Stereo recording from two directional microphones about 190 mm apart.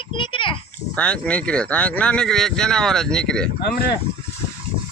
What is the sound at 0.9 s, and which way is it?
Speech, 5° left (ahead or behind).